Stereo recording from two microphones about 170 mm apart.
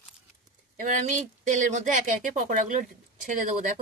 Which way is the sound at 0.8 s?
45° right (ahead or behind).